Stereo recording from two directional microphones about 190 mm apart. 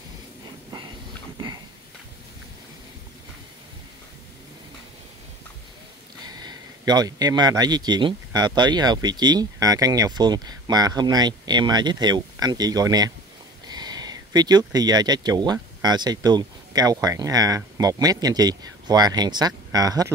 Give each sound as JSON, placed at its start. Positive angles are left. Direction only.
{"t": 6.2, "sound": "speech", "side_deg": -20}